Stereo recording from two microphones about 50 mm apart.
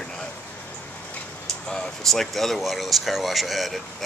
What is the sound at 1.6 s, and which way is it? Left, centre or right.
Speech, centre.